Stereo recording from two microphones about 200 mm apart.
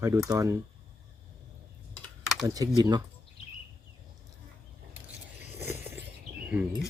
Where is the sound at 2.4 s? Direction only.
20° right (ahead or behind).